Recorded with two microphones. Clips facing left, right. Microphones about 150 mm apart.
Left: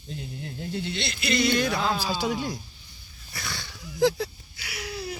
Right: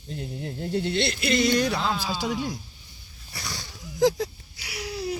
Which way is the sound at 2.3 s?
50° left (ahead or behind).